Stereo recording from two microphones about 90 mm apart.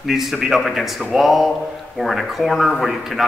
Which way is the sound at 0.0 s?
5° right (ahead or behind).